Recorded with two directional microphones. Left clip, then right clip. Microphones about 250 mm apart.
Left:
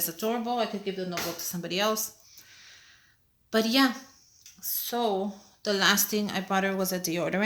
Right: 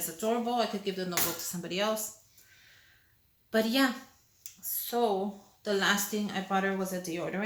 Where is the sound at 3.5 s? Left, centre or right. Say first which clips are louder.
Left 3 dB; left.